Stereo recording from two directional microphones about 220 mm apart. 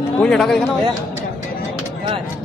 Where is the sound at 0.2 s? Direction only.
Centre (ahead or behind).